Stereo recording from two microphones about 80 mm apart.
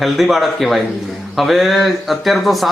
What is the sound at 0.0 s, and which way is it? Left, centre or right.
Speech, centre.